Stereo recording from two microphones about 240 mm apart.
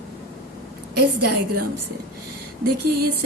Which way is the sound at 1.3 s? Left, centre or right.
Right.